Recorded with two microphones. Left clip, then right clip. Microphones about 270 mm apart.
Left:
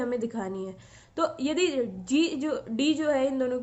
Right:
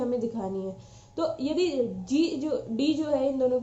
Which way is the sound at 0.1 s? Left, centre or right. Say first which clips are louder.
Right 1 dB; left.